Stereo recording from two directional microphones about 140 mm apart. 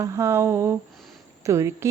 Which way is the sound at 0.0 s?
20° right (ahead or behind).